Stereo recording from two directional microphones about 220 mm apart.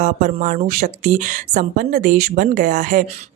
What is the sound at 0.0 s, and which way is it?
Speech, 35° right (ahead or behind).